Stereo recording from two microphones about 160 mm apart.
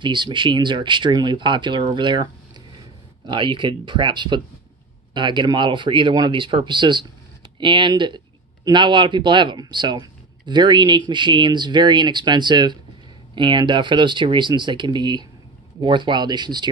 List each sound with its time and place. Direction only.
0.0 s speech: 30° right (ahead or behind)
3.3 s speech: 30° right (ahead or behind)